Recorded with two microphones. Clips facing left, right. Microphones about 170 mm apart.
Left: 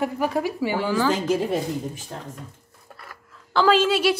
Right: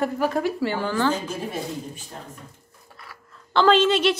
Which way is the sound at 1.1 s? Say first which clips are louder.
Left 6 dB; 90° left.